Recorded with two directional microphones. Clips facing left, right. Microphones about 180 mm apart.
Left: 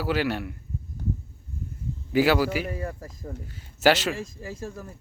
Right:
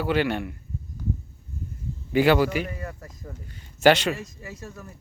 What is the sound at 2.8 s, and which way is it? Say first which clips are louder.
Speech: left 3 dB; 30° left (ahead or behind).